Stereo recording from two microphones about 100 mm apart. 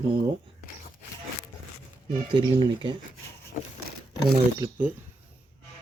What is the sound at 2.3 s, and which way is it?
Speech, 50° right (ahead or behind).